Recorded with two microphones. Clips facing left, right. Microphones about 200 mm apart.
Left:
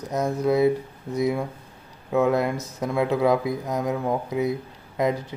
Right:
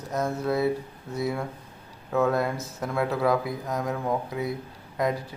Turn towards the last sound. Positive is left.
turn(degrees=20)  # may be behind; listen again after turning